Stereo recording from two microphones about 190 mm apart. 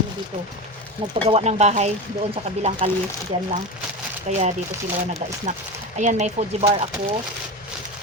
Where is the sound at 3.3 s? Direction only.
25° right (ahead or behind).